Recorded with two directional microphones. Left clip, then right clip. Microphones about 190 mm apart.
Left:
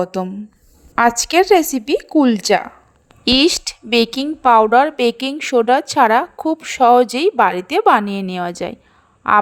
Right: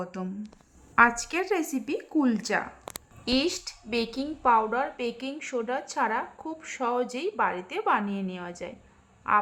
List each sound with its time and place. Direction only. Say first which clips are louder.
0.0 s a woman's voice: left 15 dB; 40° left (ahead or behind)